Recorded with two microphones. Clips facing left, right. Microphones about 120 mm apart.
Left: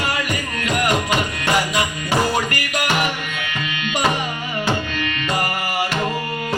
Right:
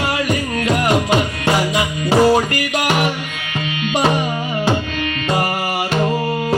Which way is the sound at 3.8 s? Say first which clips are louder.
Right 4 dB; 35° right (ahead or behind).